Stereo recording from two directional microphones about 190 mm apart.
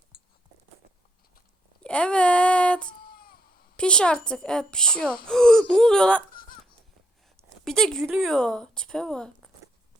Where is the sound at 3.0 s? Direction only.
50° left (ahead or behind).